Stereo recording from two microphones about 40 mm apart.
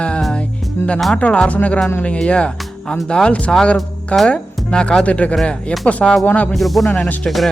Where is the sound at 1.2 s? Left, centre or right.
Left.